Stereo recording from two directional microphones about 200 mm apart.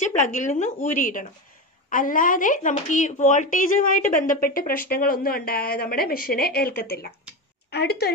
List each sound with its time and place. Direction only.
0.0 s a woman's voice: 40° left (ahead or behind); by 8.1 s 55° left (ahead or behind)